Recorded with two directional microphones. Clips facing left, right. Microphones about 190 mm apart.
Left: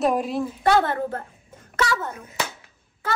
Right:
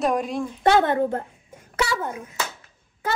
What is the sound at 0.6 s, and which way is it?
Speech, 20° right (ahead or behind).